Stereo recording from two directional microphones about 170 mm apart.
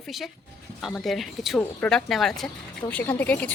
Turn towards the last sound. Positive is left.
turn(degrees=10)  # may be behind; listen again after turning